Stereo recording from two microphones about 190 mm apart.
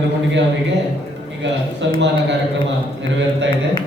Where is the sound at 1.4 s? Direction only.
70° right (ahead or behind).